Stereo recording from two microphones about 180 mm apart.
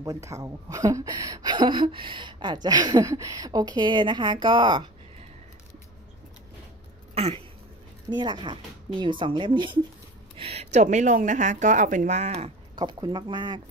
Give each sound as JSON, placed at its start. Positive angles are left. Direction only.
{"t": 0.0, "sound": "a woman's voice", "side_deg": -20}
{"t": 7.2, "sound": "a sound", "side_deg": -35}
{"t": 8.1, "sound": "a woman's voice", "side_deg": -25}
{"t": 12.7, "sound": "a woman's voice", "side_deg": -25}